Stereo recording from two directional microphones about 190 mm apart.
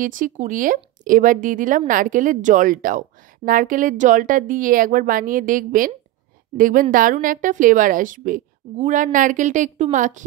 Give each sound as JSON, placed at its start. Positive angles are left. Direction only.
{"t": 0.0, "sound": "speech", "side_deg": -45}